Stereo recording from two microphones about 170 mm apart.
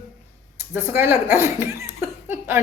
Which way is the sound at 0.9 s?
15° right (ahead or behind).